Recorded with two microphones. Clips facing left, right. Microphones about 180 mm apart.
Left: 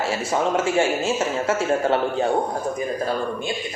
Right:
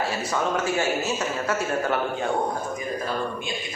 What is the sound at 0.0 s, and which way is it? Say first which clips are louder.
A man's voice: left 3 dB; 25° left (ahead or behind).